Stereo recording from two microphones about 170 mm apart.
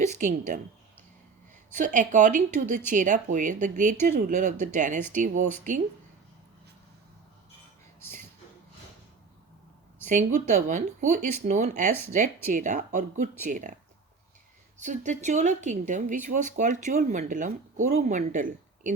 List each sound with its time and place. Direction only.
0.1 s a woman's voice: 45° right (ahead or behind)
1.7 s speech: 45° right (ahead or behind)
10.1 s speech: 45° right (ahead or behind)
14.8 s speech: 45° right (ahead or behind)